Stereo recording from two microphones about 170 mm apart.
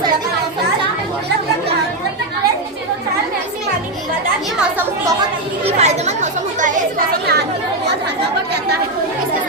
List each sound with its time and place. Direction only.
5.6 s chatter: 40° right (ahead or behind)
6.6 s speech: 50° right (ahead or behind); by 7.4 s 65° right (ahead or behind)